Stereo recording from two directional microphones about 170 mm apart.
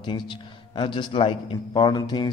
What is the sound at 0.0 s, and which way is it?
A man's voice, 25° left (ahead or behind).